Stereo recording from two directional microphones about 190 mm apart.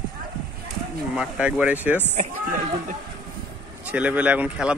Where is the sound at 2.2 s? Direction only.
45° right (ahead or behind).